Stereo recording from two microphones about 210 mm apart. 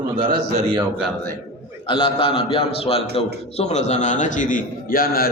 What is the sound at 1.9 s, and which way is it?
A man's voice, 25° left (ahead or behind).